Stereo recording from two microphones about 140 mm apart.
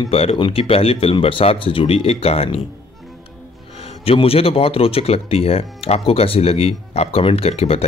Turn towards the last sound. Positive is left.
turn(degrees=45)  # may be behind; listen again after turning